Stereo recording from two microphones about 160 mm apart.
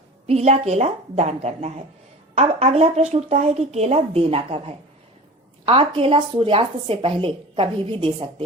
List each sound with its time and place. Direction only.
0.3 s a woman's voice: 40° right (ahead or behind)